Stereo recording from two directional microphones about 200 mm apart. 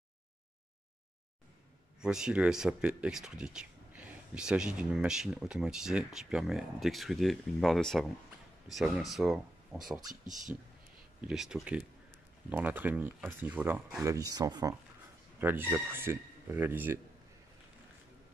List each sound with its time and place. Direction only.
2.0 s speech: 5° right (ahead or behind)
9.9 s speech: 20° right (ahead or behind)
11.1 s speech: 5° right (ahead or behind)
14.0 s speech: 15° right (ahead or behind)